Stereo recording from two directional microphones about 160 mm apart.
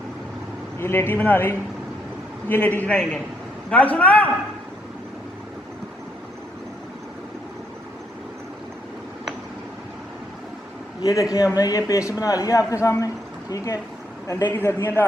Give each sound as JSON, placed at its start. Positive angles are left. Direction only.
{"t": 0.8, "sound": "a man's voice", "side_deg": 15}
{"t": 11.0, "sound": "a man's voice", "side_deg": 20}
{"t": 14.3, "sound": "a man's voice", "side_deg": 20}